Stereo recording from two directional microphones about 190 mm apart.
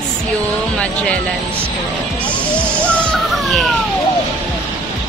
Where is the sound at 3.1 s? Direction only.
Centre (ahead or behind).